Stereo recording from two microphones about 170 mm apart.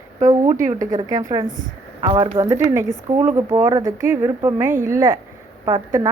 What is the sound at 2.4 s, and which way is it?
A woman's voice, 15° right (ahead or behind).